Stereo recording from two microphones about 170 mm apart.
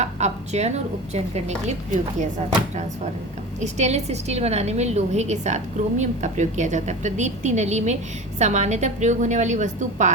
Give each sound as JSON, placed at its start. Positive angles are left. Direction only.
{"t": 0.0, "sound": "a woman's voice", "side_deg": -40}
{"t": 3.6, "sound": "a woman's voice", "side_deg": -40}